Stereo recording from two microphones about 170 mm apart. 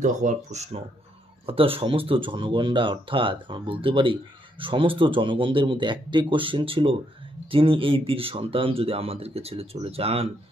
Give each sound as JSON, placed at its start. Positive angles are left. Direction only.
{"t": 0.0, "sound": "speech", "side_deg": -45}